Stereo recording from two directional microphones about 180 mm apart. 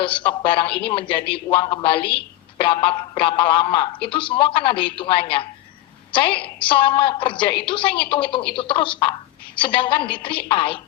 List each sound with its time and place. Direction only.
0.0 s a man's voice: 30° left (ahead or behind)